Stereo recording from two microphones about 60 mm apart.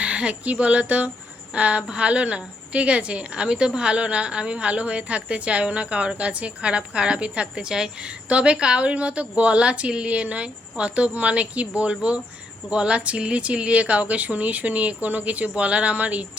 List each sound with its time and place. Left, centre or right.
0.0 s a woman's voice: centre